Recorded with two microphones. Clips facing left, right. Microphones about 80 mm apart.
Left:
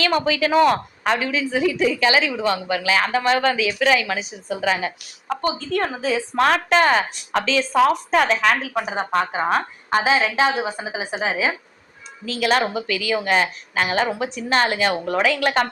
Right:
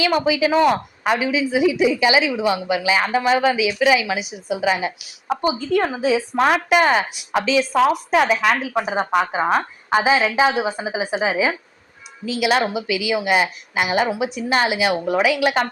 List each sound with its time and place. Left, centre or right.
0.0 s a woman's voice: centre